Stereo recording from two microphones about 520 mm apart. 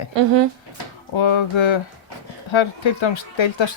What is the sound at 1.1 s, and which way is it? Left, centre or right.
Speech, left.